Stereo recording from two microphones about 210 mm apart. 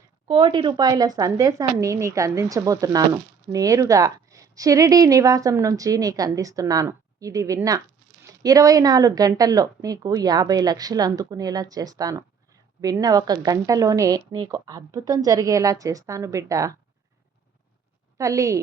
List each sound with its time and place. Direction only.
0.3 s speech: 25° right (ahead or behind)
18.2 s speech: 15° right (ahead or behind)